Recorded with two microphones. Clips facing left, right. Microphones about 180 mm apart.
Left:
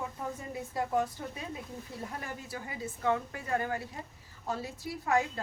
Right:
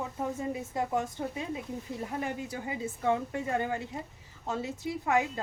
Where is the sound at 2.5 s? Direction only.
20° right (ahead or behind).